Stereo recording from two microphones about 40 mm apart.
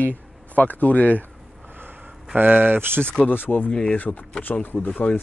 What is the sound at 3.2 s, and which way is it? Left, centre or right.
Speech, left.